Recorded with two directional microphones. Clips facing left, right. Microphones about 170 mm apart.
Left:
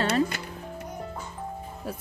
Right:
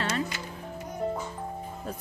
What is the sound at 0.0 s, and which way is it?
Music, 65° left (ahead or behind).